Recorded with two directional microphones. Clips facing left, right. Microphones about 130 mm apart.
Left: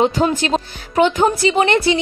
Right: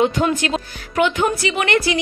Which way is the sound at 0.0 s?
30° left (ahead or behind).